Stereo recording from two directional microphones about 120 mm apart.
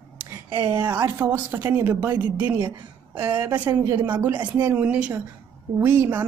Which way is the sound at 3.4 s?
15° right (ahead or behind).